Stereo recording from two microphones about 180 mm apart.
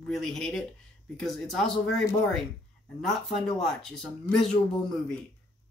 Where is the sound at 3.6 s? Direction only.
5° left (ahead or behind).